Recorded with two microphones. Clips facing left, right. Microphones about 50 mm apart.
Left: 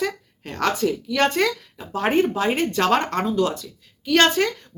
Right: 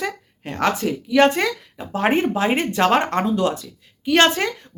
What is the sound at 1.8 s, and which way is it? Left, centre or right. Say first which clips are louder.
Speech: right 1 dB; right.